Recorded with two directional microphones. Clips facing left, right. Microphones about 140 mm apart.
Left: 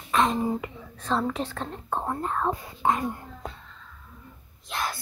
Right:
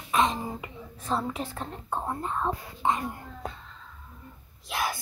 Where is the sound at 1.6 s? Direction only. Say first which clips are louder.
Left 2 dB; 30° left (ahead or behind).